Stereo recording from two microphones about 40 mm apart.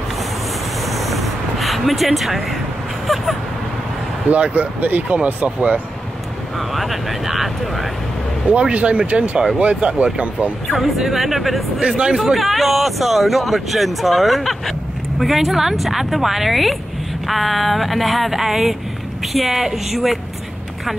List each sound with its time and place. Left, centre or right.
0.8 s a sound: centre
3.1 s speech: centre
4.3 s speech: right
4.7 s speech: right
6.7 s speech: centre
8.5 s speech: right
10.8 s speech: centre